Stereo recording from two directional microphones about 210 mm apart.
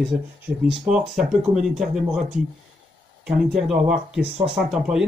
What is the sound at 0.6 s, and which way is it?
Speech, 5° right (ahead or behind).